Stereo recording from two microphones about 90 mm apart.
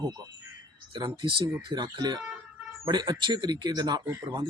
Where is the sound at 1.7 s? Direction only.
55° right (ahead or behind).